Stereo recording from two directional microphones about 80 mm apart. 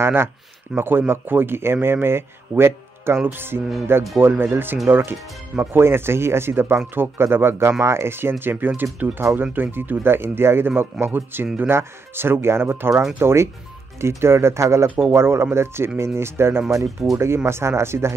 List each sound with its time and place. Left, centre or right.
0.0 s speech: right
9.0 s speech: right
9.4 s speech: right